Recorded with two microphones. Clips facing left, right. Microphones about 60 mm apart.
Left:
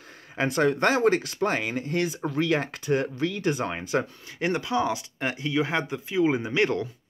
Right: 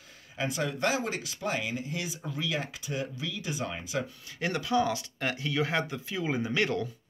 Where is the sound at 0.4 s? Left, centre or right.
Left.